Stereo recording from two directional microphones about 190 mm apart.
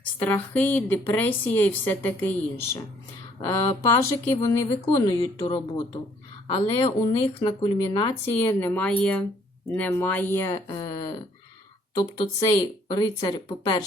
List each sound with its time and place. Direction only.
0.0 s speech: 10° left (ahead or behind)
6.5 s speech: 30° left (ahead or behind)
8.2 s speech: 10° left (ahead or behind)